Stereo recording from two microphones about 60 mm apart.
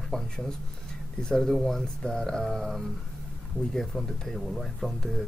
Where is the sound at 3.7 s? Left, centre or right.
Centre.